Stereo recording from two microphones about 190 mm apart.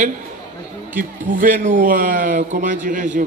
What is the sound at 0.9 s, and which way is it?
A man's voice, 45° right (ahead or behind).